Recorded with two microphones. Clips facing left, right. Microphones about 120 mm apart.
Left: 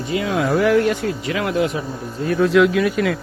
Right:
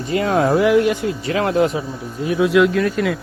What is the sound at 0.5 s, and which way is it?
Speech, 20° right (ahead or behind).